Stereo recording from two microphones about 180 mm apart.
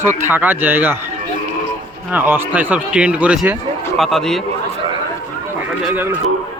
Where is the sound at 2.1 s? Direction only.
10° right (ahead or behind).